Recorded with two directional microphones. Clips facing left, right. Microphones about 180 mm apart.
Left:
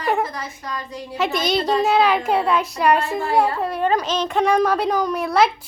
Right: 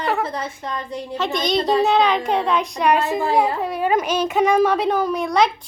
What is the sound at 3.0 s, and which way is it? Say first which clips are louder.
Speech: right 3 dB; 20° right (ahead or behind).